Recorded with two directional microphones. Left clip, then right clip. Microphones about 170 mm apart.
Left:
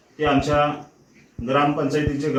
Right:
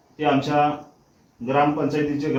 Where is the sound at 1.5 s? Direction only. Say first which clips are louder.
Even; 40° right (ahead or behind).